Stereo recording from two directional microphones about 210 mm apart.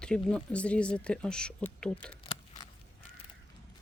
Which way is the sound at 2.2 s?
25° left (ahead or behind).